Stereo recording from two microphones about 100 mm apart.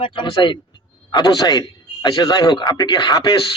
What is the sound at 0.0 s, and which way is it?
A man's voice, 60° left (ahead or behind).